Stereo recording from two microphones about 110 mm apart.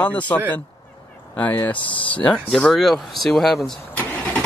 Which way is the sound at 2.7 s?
Centre (ahead or behind).